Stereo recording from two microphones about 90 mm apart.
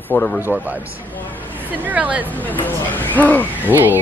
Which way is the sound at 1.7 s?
15° right (ahead or behind).